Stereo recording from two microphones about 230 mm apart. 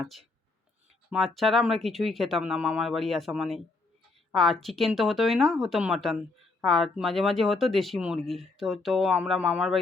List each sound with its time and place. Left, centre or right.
0.0 s speech: centre